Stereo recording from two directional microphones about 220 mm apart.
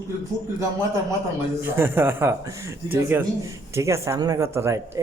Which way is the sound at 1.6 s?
10° right (ahead or behind).